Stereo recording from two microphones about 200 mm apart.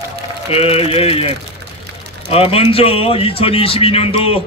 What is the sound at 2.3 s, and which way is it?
A man's voice, 30° left (ahead or behind).